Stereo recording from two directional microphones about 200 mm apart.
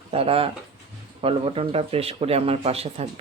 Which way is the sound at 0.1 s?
30° right (ahead or behind).